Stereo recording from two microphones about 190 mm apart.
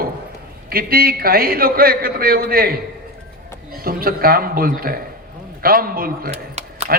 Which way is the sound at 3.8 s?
50° right (ahead or behind).